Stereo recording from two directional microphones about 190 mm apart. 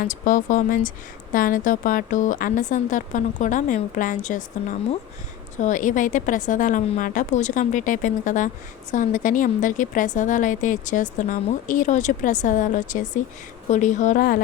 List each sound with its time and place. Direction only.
0.0 s a woman's voice: 45° left (ahead or behind)